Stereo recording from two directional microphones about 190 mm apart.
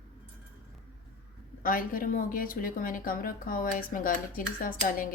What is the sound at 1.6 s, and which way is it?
A woman's voice, 45° left (ahead or behind).